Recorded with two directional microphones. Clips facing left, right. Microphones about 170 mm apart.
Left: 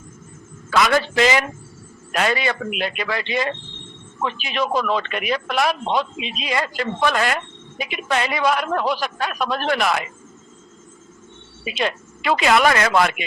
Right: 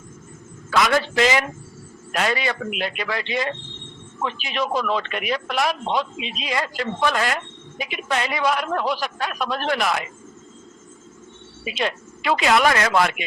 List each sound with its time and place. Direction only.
0.9 s a man's voice: 80° left
2.1 s speech: 70° left (ahead or behind)
11.8 s speech: 75° left (ahead or behind)